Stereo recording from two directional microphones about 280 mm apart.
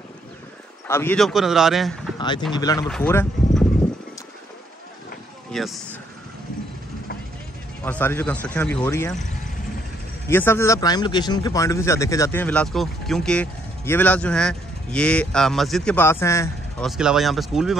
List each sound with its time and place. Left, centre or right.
0.8 s speech: centre
2.1 s a sound: centre
2.5 s speech: centre
5.5 s speech: centre
7.8 s speech: centre
10.3 s speech: centre
16.9 s speech: centre